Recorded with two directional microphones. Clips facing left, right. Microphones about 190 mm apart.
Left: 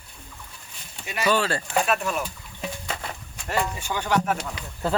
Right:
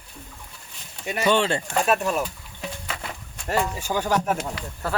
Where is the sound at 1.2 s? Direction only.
25° right (ahead or behind).